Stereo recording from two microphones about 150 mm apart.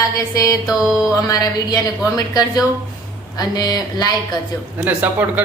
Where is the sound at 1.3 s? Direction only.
25° left (ahead or behind).